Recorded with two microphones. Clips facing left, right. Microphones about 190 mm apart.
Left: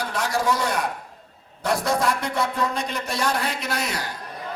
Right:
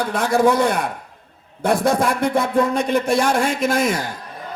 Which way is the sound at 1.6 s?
55° right (ahead or behind).